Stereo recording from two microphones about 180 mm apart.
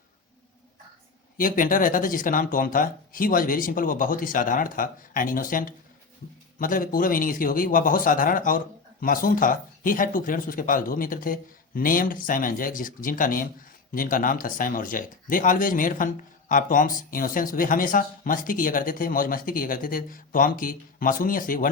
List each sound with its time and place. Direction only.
1.4 s speech: 50° left (ahead or behind)